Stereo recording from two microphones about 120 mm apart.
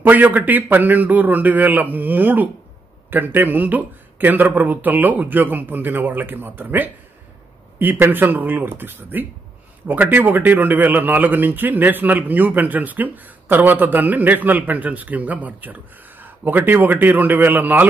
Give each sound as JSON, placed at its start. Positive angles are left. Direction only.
{"t": 0.0, "sound": "a man's voice", "side_deg": -15}